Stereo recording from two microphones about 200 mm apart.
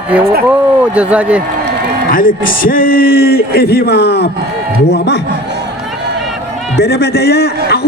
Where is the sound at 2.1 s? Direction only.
45° left (ahead or behind).